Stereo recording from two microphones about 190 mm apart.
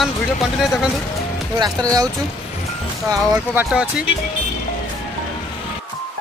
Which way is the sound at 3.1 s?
10° right (ahead or behind).